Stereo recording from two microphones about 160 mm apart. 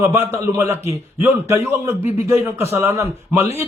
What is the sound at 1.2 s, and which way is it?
A man's voice, 15° right (ahead or behind).